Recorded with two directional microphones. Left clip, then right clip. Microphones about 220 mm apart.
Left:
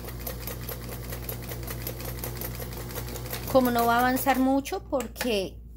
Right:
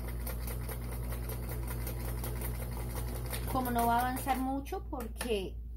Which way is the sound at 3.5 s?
55° left (ahead or behind).